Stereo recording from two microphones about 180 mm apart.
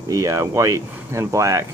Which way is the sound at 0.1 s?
15° right (ahead or behind).